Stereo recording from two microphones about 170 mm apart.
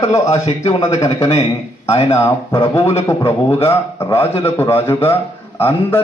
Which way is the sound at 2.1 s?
15° left (ahead or behind).